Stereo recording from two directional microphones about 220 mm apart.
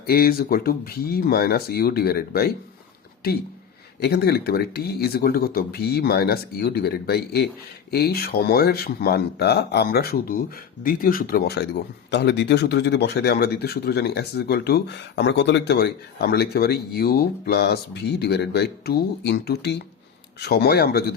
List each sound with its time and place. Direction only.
0.0 s speech: 45° left (ahead or behind)
4.0 s speech: 45° left (ahead or behind)